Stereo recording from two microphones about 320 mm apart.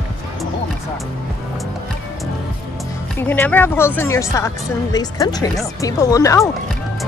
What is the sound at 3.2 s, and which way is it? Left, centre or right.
Speech, centre.